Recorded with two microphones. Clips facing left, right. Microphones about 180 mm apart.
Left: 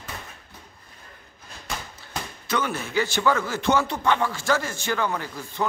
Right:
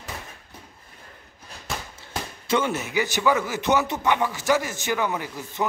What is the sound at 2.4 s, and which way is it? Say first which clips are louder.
Speech: right 3 dB; 25° right (ahead or behind).